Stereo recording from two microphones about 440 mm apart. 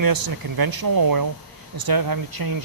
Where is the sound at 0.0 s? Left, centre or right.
Right.